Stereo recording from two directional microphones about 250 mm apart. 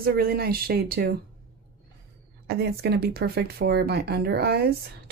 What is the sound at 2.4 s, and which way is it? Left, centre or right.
Speech, right.